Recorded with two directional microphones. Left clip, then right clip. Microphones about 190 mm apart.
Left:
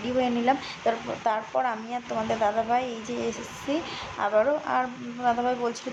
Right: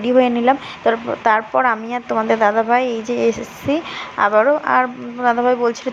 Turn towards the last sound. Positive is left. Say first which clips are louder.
# right 10 dB
turn(degrees=-20)  # may be behind; listen again after turning